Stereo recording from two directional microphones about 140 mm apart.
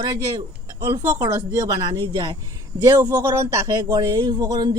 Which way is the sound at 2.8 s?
15° right (ahead or behind).